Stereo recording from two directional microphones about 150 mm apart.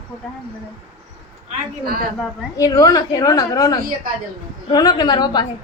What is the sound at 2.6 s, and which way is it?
A woman's voice, 25° left (ahead or behind).